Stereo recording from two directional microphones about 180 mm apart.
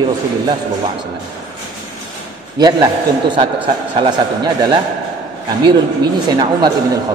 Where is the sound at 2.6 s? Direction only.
20° right (ahead or behind).